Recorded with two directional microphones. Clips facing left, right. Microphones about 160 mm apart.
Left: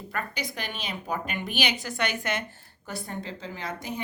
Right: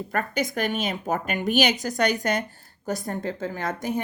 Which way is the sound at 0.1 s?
45° right (ahead or behind).